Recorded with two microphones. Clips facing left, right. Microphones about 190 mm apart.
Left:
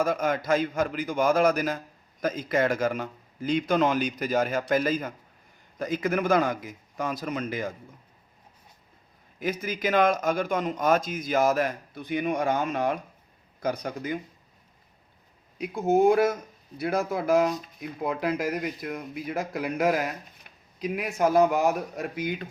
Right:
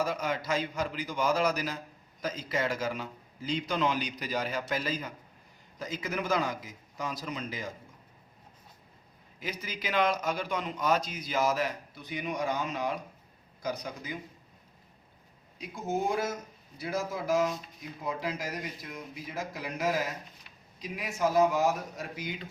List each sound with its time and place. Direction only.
0.0 s speech: 50° left (ahead or behind)
9.4 s speech: 50° left (ahead or behind)
15.5 s speech: 60° left (ahead or behind)